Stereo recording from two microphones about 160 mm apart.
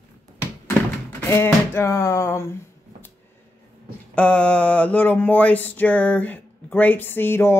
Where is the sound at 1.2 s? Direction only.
15° left (ahead or behind).